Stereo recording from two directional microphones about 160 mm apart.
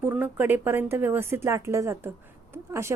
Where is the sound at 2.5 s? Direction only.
15° right (ahead or behind).